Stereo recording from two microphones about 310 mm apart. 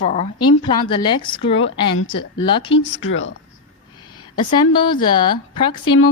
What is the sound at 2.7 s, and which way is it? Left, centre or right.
Speech, left.